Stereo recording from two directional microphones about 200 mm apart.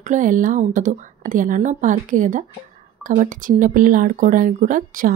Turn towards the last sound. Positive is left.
turn(degrees=-40)  # may be behind; listen again after turning